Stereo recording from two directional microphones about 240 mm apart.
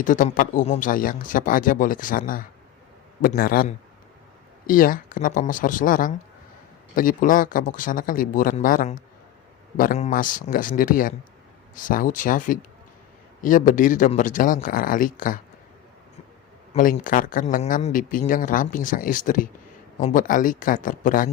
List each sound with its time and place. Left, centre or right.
0.0 s speech: left
16.7 s speech: left